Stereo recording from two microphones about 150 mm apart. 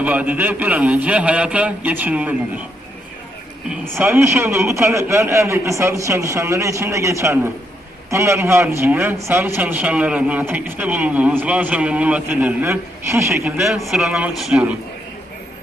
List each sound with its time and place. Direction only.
0.0 s a man's voice: 10° right (ahead or behind)
3.9 s a man's voice: 15° right (ahead or behind)
13.6 s a man's voice: centre (ahead or behind)